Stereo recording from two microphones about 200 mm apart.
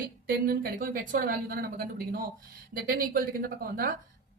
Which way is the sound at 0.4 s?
45° right (ahead or behind).